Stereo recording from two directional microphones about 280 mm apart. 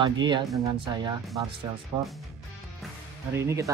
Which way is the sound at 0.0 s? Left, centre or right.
Centre.